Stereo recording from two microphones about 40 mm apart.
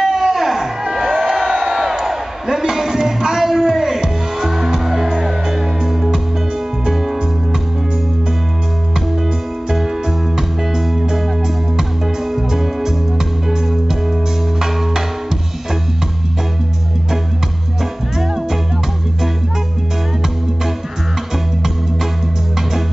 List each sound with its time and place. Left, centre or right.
0.0 s music: centre
9.7 s music: centre
12.3 s music: centre
18.2 s music: centre